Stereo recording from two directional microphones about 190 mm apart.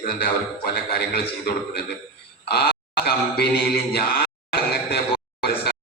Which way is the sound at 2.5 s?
55° left (ahead or behind).